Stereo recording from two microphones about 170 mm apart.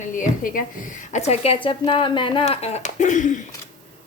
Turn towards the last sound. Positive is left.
turn(degrees=45)  # may be behind; listen again after turning